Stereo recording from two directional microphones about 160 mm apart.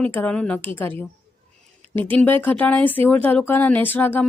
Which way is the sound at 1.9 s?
10° left (ahead or behind).